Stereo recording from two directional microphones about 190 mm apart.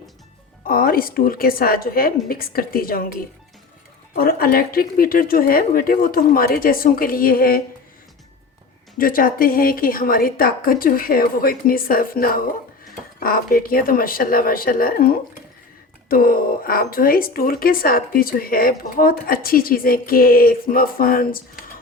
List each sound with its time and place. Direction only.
0.7 s speech: 50° left (ahead or behind)
4.1 s speech: 50° left (ahead or behind)
9.0 s speech: 50° left (ahead or behind)